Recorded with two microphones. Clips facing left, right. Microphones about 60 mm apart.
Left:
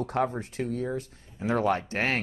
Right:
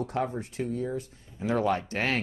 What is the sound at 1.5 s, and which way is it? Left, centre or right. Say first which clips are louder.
Speech: left 1 dB; left.